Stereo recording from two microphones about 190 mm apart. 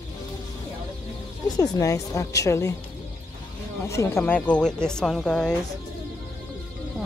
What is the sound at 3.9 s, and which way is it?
Speech, 15° left (ahead or behind).